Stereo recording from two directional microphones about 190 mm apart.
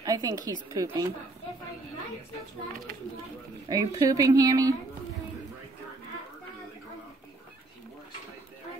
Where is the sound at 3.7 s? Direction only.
20° right (ahead or behind).